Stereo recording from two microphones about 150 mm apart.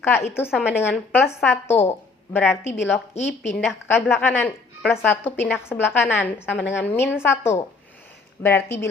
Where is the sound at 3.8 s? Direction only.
15° left (ahead or behind).